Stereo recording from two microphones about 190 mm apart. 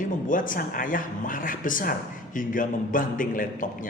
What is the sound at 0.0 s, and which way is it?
A man's voice, 45° left (ahead or behind).